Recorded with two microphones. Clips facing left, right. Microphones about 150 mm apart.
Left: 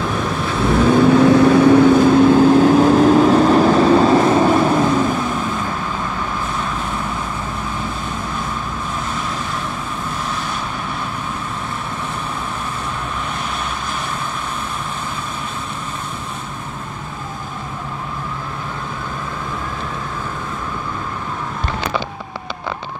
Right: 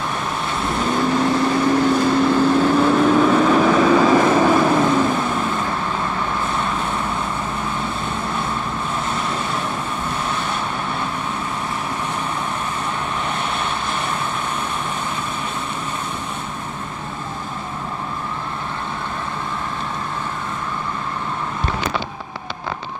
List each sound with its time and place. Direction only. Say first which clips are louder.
0.7 s vehicle: left 8 dB; 65° left (ahead or behind); by 4.3 s 30° left (ahead or behind)
4.4 s vehicle: left 1 dB; centre (ahead or behind)